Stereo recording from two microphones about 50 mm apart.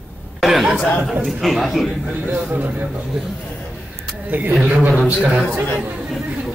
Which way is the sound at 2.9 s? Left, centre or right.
Centre.